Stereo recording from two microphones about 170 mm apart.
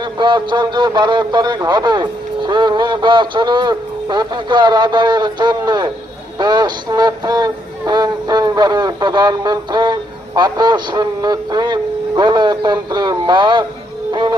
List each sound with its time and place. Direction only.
0.0 s speech: 25° right (ahead or behind)
6.4 s music: 25° right (ahead or behind)